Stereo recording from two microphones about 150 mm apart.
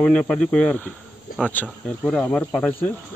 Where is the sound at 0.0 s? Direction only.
5° left (ahead or behind).